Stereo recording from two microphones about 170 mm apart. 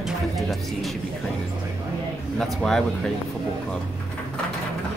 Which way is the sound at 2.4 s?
5° left (ahead or behind).